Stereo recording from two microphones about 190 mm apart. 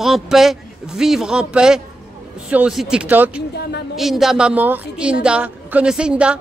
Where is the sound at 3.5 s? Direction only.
60° left (ahead or behind).